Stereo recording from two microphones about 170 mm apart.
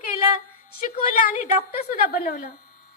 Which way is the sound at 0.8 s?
55° left (ahead or behind).